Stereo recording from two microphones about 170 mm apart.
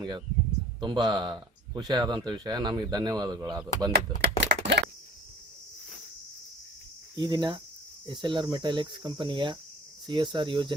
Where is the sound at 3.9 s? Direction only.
85° right.